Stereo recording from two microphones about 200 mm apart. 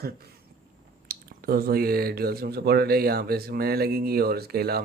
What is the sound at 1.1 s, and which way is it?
Speech, 45° right (ahead or behind).